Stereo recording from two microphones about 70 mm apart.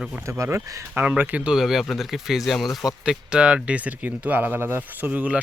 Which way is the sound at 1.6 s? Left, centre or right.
Centre.